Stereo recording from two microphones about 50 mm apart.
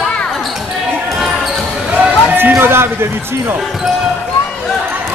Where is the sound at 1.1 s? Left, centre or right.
Centre.